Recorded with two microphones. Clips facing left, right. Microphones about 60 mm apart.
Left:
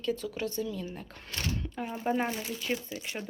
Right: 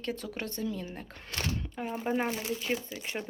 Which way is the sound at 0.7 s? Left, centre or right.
Right.